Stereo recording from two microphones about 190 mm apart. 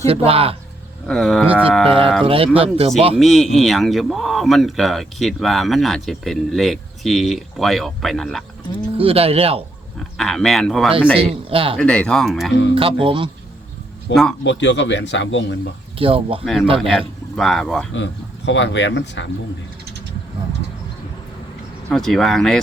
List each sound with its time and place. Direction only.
0.3 s speech: 30° right (ahead or behind)
1.0 s speech: centre (ahead or behind)
1.9 s a man's voice: 30° right (ahead or behind)
3.2 s speech: centre (ahead or behind)
9.0 s speech: 30° right (ahead or behind)
10.2 s speech: centre (ahead or behind)
10.9 s a man's voice: 30° right (ahead or behind)
11.8 s speech: 5° left (ahead or behind)
12.7 s a man's voice: 25° right (ahead or behind)
14.1 s speech: 70° left (ahead or behind)
16.0 s a man's voice: 30° right (ahead or behind)
16.4 s speech: centre (ahead or behind)
17.9 s speech: 70° left (ahead or behind)
21.8 s speech: centre (ahead or behind)